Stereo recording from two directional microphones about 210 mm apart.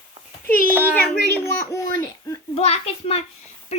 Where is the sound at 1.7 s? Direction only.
15° left (ahead or behind).